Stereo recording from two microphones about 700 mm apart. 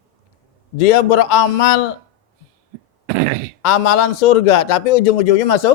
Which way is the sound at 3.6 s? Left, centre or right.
Left.